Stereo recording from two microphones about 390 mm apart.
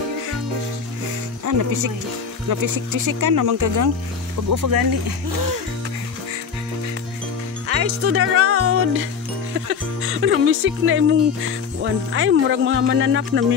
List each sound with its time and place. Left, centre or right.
1.4 s speech: right
7.6 s speech: right